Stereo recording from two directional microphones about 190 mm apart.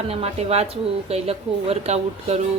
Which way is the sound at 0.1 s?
30° right (ahead or behind).